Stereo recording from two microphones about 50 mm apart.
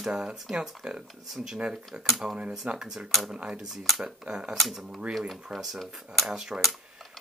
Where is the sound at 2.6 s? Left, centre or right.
Centre.